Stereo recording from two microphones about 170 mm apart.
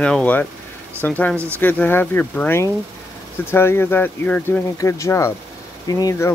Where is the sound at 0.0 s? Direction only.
5° left (ahead or behind).